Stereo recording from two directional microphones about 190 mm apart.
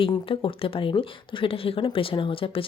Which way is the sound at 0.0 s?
30° left (ahead or behind).